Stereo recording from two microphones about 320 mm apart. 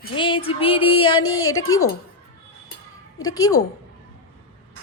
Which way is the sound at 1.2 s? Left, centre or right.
Left.